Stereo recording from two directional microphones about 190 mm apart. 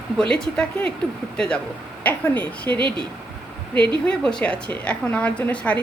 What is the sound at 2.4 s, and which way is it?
Speech, 5° left (ahead or behind).